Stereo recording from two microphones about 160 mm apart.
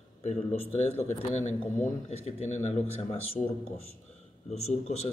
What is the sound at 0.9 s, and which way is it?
Speech, 45° left (ahead or behind).